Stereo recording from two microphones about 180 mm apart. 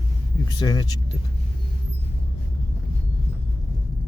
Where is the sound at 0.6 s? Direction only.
25° left (ahead or behind).